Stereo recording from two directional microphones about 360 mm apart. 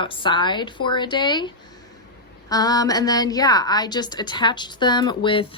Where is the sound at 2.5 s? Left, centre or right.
Centre.